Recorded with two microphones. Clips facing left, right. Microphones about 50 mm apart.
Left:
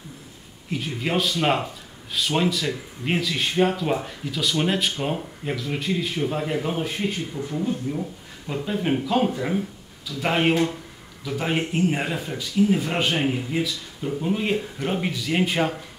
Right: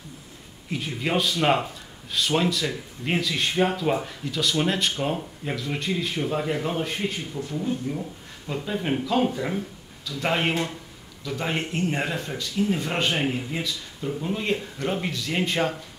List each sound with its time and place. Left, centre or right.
0.7 s speech: centre
7.4 s speech: centre
8.5 s speech: centre